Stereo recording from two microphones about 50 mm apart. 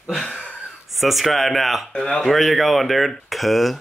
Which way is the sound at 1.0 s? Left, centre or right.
Centre.